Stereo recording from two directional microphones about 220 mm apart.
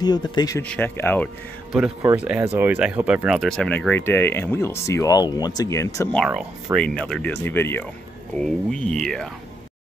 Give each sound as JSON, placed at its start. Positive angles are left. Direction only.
{"t": 0.0, "sound": "speech", "side_deg": 20}
{"t": 2.0, "sound": "speech", "side_deg": -10}
{"t": 6.1, "sound": "speech", "side_deg": 0}